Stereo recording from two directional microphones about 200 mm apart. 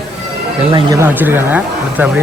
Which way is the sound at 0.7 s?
15° right (ahead or behind).